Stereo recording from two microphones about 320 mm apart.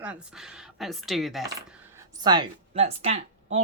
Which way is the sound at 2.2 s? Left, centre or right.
Centre.